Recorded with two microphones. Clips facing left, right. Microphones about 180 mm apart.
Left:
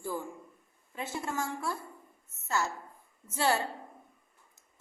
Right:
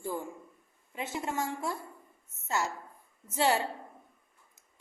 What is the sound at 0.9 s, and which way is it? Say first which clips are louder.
Speech: right 1 dB; 20° right (ahead or behind).